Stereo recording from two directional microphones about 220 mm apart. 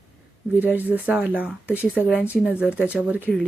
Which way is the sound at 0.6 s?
10° right (ahead or behind).